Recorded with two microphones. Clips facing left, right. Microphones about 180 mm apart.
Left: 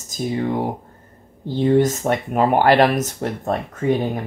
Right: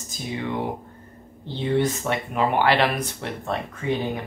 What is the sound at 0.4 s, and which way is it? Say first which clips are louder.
Speech: left 3 dB; 40° left (ahead or behind).